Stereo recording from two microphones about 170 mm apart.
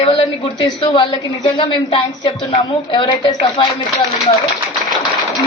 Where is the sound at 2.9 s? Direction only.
30° left (ahead or behind).